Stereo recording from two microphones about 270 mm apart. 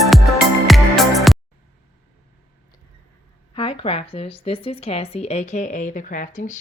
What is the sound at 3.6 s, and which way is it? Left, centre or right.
Speech, centre.